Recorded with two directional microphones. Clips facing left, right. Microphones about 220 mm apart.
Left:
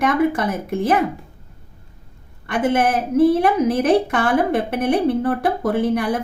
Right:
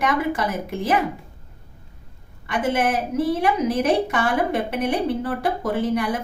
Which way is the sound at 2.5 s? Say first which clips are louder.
Left 3 dB; 55° left (ahead or behind).